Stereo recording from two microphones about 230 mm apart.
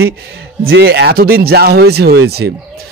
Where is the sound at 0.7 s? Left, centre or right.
Right.